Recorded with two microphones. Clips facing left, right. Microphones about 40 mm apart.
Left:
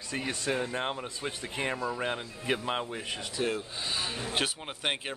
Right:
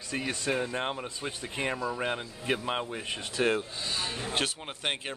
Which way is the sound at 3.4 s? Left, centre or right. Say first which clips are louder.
Right 4 dB; right.